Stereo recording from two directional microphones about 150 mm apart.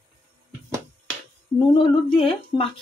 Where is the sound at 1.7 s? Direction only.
35° left (ahead or behind).